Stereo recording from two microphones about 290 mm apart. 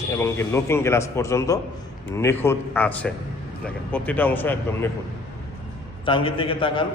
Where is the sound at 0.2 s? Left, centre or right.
Centre.